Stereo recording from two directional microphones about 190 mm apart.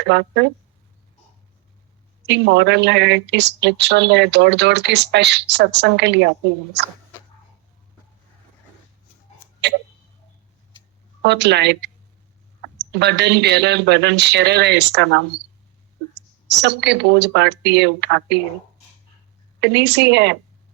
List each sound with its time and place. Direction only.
0.0 s speech: 65° right (ahead or behind)
2.2 s speech: 65° right (ahead or behind)
9.6 s tick-tock: 65° right (ahead or behind)
11.2 s speech: 65° right (ahead or behind)
16.5 s speech: 65° right (ahead or behind)
19.5 s speech: 65° right (ahead or behind)